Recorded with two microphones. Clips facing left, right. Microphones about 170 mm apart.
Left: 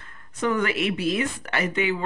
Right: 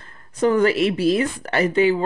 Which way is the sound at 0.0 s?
35° right (ahead or behind).